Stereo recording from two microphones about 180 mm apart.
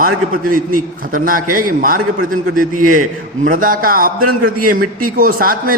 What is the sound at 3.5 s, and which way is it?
A man's voice, 50° right (ahead or behind).